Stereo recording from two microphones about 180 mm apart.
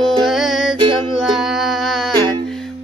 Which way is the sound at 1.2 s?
Centre (ahead or behind).